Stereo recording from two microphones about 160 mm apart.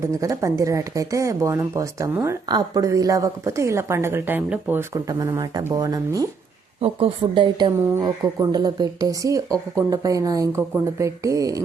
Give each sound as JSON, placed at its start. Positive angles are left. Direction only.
{"t": 0.0, "sound": "a woman's voice", "side_deg": -20}
{"t": 6.8, "sound": "a woman's voice", "side_deg": -35}